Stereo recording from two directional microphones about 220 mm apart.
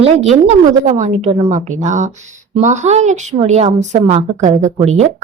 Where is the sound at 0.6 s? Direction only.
35° right (ahead or behind).